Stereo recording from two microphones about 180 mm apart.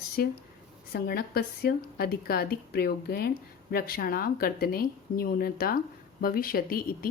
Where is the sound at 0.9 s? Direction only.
55° left (ahead or behind).